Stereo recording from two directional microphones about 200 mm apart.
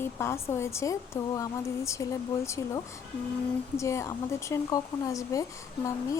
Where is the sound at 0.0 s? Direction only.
10° left (ahead or behind).